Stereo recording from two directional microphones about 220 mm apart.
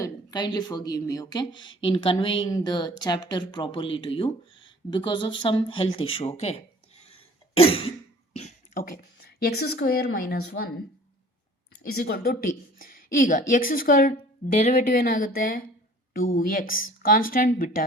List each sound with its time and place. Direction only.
0.0 s speech: 20° left (ahead or behind)
7.0 s cough: 25° left (ahead or behind); by 10.7 s 45° left (ahead or behind)
11.8 s a woman's voice: 45° left (ahead or behind)